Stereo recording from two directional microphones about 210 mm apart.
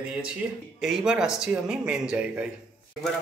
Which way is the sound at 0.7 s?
Centre (ahead or behind).